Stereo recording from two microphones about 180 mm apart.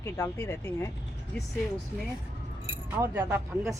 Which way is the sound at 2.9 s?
10° right (ahead or behind).